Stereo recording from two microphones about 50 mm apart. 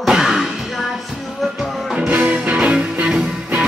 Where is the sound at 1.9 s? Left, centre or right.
Right.